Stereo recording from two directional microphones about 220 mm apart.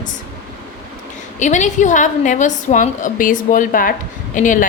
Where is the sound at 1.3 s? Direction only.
35° left (ahead or behind).